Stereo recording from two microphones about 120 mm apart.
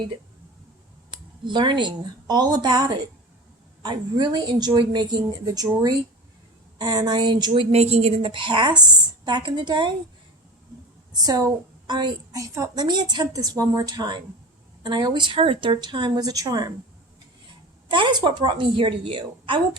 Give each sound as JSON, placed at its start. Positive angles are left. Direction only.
{"t": 1.5, "sound": "a woman's voice", "side_deg": -40}
{"t": 11.1, "sound": "a woman's voice", "side_deg": -35}
{"t": 12.4, "sound": "a woman's voice", "side_deg": -30}
{"t": 17.8, "sound": "speech", "side_deg": -40}